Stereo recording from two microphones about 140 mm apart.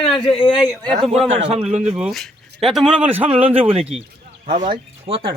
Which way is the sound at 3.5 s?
45° right (ahead or behind).